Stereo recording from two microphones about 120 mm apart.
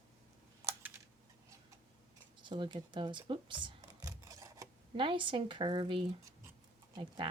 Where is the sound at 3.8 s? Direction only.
30° right (ahead or behind).